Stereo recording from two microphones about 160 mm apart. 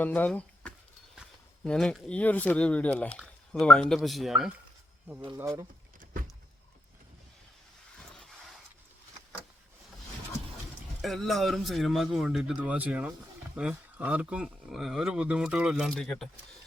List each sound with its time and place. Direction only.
0.0 s speech: 10° left (ahead or behind); by 5.6 s 15° right (ahead or behind)
8.1 s a sound: 5° left (ahead or behind)
11.0 s speech: centre (ahead or behind)